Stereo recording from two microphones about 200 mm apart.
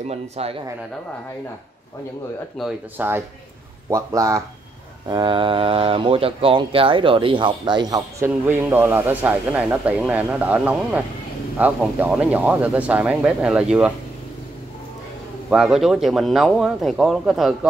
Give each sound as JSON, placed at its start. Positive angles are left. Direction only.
{"t": 0.0, "sound": "speech", "side_deg": -30}
{"t": 2.6, "sound": "speech", "side_deg": -10}
{"t": 15.5, "sound": "speech", "side_deg": -5}